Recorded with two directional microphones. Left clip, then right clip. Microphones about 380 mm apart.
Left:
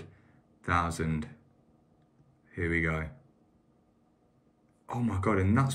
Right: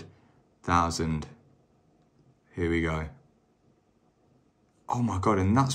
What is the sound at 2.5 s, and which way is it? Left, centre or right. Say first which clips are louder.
Speech: right 2 dB; centre.